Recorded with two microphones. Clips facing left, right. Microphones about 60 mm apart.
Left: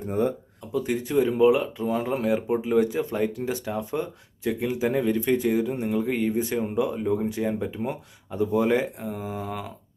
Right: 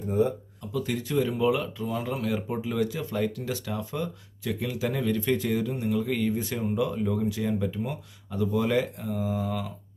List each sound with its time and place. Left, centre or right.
0.1 s speech: left
0.7 s speech: left